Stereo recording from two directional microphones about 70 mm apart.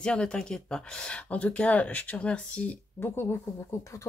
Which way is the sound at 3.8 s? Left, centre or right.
Left.